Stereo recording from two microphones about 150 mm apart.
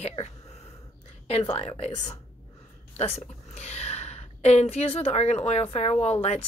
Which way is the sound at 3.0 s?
45° left (ahead or behind).